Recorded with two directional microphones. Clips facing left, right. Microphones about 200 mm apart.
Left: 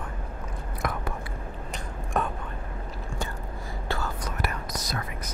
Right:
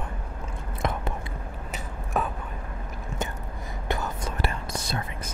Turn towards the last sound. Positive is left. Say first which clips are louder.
# right 1 dB
turn(degrees=-30)  # may be behind; listen again after turning